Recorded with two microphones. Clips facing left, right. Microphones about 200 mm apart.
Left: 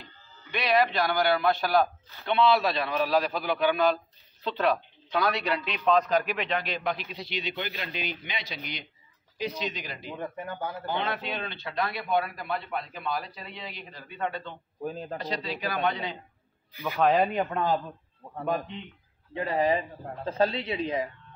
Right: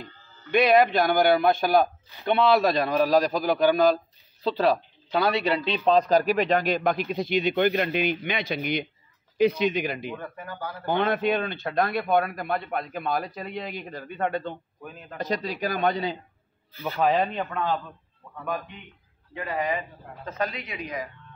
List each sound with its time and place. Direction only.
0.0 s a man's voice: 50° right (ahead or behind)
10.1 s speech: 20° left (ahead or behind)
10.9 s a man's voice: 50° right (ahead or behind)
14.8 s a woman's voice: 35° left (ahead or behind)
15.1 s a man's voice: 45° right (ahead or behind)
16.7 s a man's voice: 15° left (ahead or behind)
17.0 s speech: centre (ahead or behind)
17.3 s a man's voice: 15° left (ahead or behind)
18.4 s a woman's voice: 25° left (ahead or behind)